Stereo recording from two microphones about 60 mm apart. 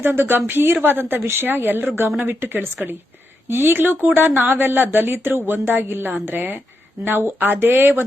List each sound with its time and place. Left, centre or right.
0.0 s speech: right